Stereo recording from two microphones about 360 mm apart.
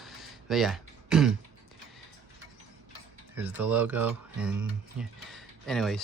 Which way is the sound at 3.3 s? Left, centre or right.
Centre.